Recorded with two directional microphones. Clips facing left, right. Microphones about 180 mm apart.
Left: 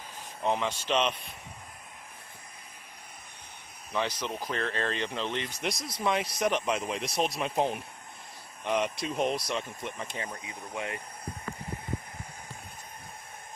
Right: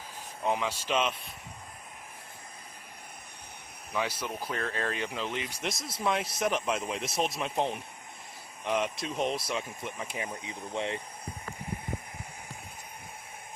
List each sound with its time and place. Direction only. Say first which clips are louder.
0.4 s speech: left 1 dB; 5° right (ahead or behind)
3.9 s speech: left 1 dB; 10° right (ahead or behind)
10.4 s speech: right 3 dB; 25° right (ahead or behind)